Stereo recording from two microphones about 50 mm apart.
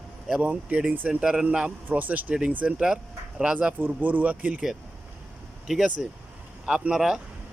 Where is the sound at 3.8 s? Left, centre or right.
Right.